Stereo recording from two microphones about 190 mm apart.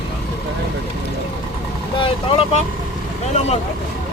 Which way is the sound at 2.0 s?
30° left (ahead or behind).